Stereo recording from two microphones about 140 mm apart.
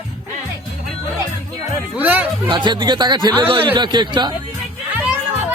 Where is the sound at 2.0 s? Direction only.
10° right (ahead or behind).